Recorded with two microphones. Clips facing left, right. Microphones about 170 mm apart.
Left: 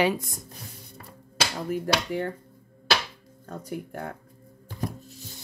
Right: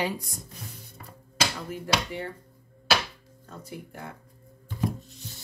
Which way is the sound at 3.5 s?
50° left (ahead or behind).